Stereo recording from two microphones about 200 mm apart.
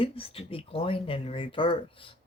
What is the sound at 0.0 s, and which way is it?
Speech, 30° left (ahead or behind).